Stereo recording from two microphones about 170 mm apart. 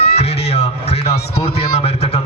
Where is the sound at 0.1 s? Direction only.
40° left (ahead or behind).